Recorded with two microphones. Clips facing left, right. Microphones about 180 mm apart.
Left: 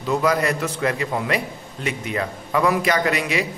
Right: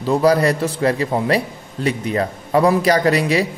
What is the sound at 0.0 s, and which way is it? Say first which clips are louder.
A man's voice: right 5 dB; 35° right (ahead or behind).